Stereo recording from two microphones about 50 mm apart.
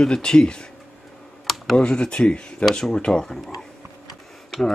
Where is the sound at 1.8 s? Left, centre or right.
Left.